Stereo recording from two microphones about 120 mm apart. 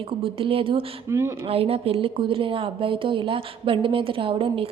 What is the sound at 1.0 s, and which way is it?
Speech, 25° right (ahead or behind).